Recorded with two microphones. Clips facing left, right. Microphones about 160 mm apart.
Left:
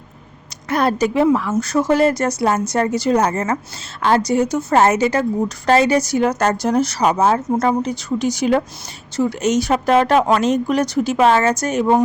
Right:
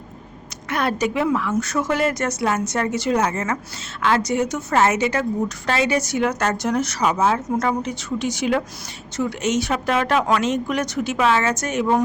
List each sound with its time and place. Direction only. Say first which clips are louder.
0.7 s a woman's voice: left 5 dB; 35° left (ahead or behind)